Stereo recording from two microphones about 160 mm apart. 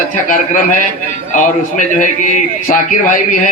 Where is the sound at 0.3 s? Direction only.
55° left (ahead or behind).